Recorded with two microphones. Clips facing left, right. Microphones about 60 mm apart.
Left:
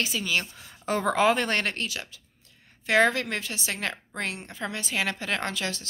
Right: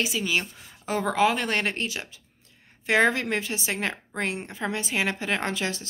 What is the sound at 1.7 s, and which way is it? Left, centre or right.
A woman's voice, right.